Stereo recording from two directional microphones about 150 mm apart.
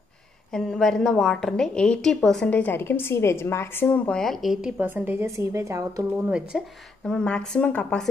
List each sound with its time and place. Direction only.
0.5 s a woman's voice: 5° left (ahead or behind)
4.7 s a woman's voice: 15° right (ahead or behind)
6.1 s a woman's voice: 5° right (ahead or behind)
7.1 s a woman's voice: 5° left (ahead or behind)